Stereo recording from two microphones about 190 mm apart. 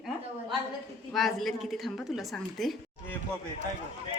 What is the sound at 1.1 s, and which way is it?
A woman's voice, centre (ahead or behind).